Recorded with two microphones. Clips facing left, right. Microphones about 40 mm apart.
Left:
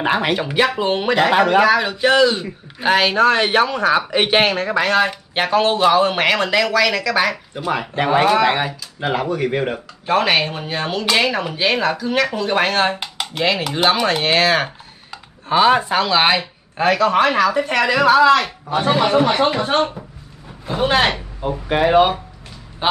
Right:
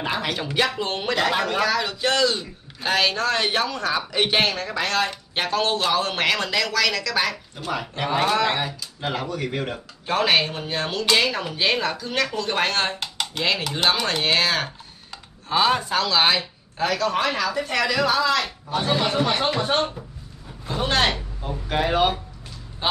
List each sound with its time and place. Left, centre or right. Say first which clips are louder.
0.0 s speech: left 8 dB; left
0.4 s speech: left 6 dB; centre
7.6 s speech: left 7 dB; left
10.0 s speech: left 4 dB; centre